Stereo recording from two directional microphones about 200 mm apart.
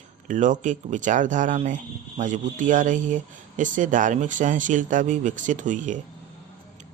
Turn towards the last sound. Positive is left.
turn(degrees=-40)  # may be behind; listen again after turning